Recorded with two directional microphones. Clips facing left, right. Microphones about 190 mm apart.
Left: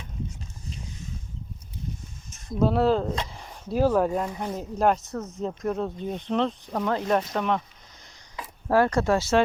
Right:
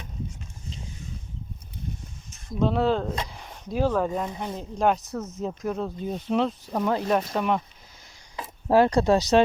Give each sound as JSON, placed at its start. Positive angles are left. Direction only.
{"t": 2.6, "sound": "speech", "side_deg": 5}
{"t": 8.4, "sound": "speech", "side_deg": -20}